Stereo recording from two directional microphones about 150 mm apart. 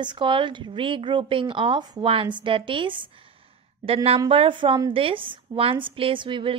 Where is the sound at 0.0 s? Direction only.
30° right (ahead or behind).